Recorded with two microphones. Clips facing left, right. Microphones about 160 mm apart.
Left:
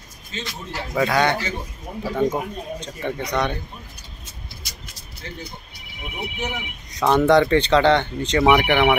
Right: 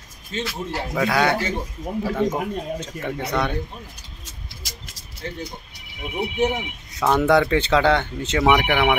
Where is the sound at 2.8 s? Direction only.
5° right (ahead or behind).